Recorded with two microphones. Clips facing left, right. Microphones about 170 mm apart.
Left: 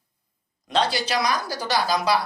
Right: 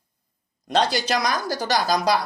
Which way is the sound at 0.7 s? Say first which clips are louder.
Right 2 dB; 45° right (ahead or behind).